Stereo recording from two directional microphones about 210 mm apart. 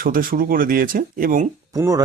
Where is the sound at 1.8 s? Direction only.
15° right (ahead or behind).